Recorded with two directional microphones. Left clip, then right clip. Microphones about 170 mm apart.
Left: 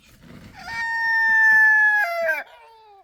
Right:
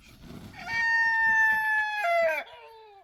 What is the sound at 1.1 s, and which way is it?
Chicken, 10° left (ahead or behind).